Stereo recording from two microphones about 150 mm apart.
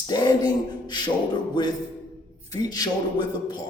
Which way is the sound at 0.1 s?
30° left (ahead or behind).